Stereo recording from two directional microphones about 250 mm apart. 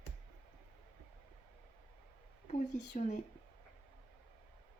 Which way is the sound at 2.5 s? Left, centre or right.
Left.